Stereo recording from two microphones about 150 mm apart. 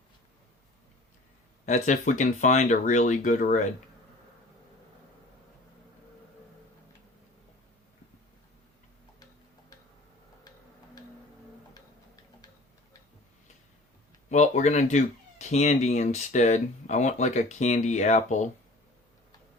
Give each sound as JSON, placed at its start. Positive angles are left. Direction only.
{"t": 1.6, "sound": "speech", "side_deg": 55}
{"t": 14.3, "sound": "speech", "side_deg": 50}